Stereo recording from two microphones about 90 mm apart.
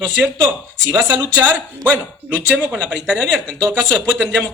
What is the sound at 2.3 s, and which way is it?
Speech, 15° right (ahead or behind).